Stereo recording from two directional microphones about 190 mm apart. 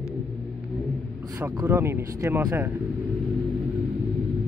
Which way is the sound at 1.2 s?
20° right (ahead or behind).